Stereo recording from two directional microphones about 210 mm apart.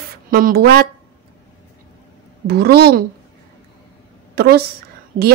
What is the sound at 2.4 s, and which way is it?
Speech, 50° right (ahead or behind).